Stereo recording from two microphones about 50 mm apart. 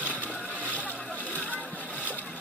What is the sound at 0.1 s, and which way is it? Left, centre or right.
Splash, left.